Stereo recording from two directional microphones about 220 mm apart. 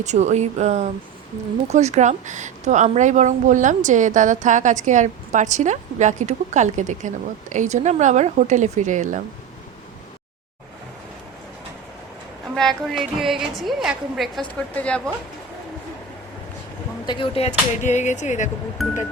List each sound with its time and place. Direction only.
0.0 s a woman's voice: 30° right (ahead or behind)
12.5 s a woman's voice: centre (ahead or behind)
17.1 s speech: 25° left (ahead or behind)
18.8 s a woman's voice: centre (ahead or behind)